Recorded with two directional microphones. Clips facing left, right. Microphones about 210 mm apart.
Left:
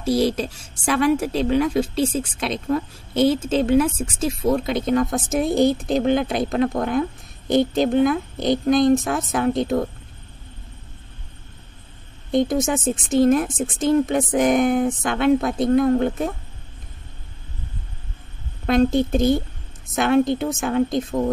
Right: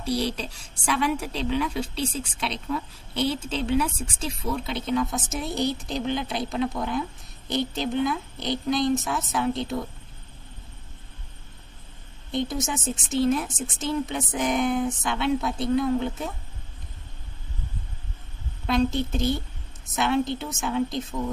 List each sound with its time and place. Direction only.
0.0 s speech: 45° left (ahead or behind)
12.3 s speech: 45° left (ahead or behind)
18.7 s speech: 50° left (ahead or behind)